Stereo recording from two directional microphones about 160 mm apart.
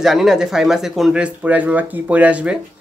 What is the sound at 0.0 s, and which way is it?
Speech, centre (ahead or behind).